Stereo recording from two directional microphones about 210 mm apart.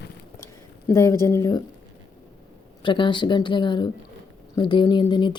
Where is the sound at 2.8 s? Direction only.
20° left (ahead or behind).